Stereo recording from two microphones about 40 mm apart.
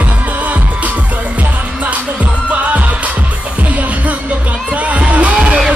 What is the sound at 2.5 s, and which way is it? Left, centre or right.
Music, right.